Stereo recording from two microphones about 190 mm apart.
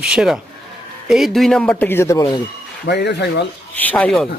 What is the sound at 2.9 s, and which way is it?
Speech, 60° left (ahead or behind).